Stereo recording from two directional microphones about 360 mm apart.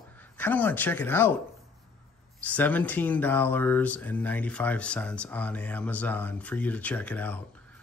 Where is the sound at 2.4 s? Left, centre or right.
Centre.